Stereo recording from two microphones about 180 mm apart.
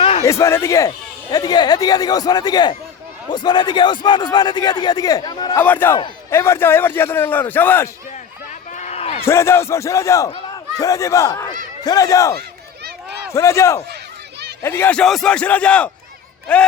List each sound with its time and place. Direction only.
0.2 s speech: 15° left (ahead or behind)
5.6 s a man's voice: 10° left (ahead or behind)
8.7 s a sound: 40° left (ahead or behind)
9.2 s a man's voice: 15° left (ahead or behind)
12.4 s a sound: 60° right (ahead or behind)
13.3 s a man's voice: 15° left (ahead or behind)